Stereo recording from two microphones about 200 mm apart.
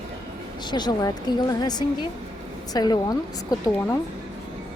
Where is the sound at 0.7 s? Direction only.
20° left (ahead or behind).